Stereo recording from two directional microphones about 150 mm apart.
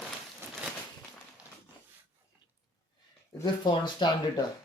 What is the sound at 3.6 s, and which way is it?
Speech, 30° left (ahead or behind).